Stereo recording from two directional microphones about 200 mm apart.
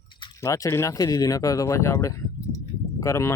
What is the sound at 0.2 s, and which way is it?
Speech, 15° left (ahead or behind).